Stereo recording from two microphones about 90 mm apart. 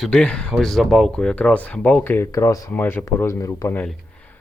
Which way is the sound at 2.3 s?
35° left (ahead or behind).